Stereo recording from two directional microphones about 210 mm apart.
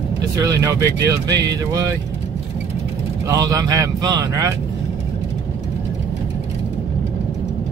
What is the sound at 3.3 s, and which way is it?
Speech, 15° right (ahead or behind).